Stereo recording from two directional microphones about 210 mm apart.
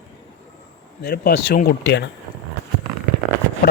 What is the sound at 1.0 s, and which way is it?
Speech, 50° left (ahead or behind).